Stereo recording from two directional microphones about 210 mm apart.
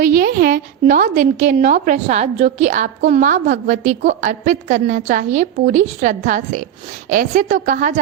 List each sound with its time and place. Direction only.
0.0 s a woman's voice: 45° right (ahead or behind)